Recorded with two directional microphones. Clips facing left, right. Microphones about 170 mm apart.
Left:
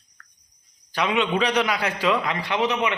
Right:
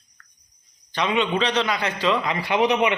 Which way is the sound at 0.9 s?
5° left (ahead or behind).